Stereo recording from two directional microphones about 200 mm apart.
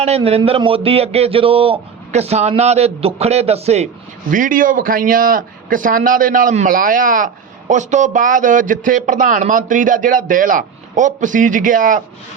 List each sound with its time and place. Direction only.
0.0 s a man's voice: 30° right (ahead or behind)
4.3 s a man's voice: 40° right (ahead or behind)